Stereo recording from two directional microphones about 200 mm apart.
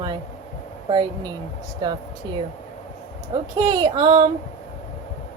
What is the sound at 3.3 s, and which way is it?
Speech, 20° right (ahead or behind).